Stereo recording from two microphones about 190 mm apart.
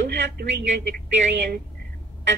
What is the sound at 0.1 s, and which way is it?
Speech, 60° right (ahead or behind).